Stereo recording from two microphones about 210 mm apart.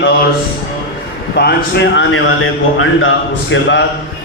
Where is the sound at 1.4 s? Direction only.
50° left (ahead or behind); by 3.1 s 75° left (ahead or behind).